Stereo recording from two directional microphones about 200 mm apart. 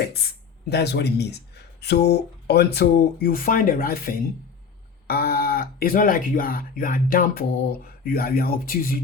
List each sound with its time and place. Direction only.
0.7 s speech: 55° left (ahead or behind)